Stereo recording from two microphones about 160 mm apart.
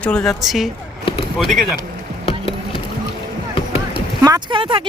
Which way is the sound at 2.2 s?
35° left (ahead or behind).